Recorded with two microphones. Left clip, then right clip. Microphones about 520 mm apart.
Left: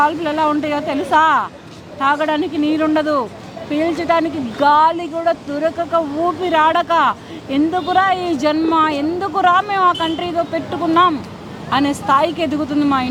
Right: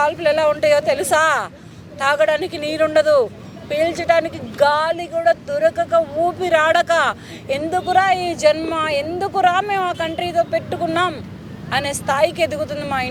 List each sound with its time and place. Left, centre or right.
0.0 s speech: right